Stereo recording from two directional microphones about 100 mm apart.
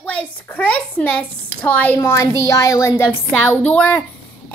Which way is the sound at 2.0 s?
30° left (ahead or behind).